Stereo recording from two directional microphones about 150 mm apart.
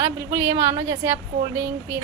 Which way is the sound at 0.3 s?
20° right (ahead or behind).